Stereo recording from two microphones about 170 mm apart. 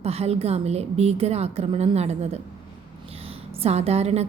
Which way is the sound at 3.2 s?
35° right (ahead or behind).